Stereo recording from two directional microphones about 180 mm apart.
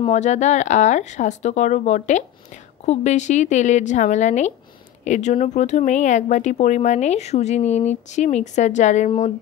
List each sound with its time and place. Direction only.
0.0 s speech: 40° left (ahead or behind)